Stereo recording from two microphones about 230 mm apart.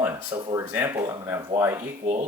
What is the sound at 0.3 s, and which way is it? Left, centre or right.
Speech, centre.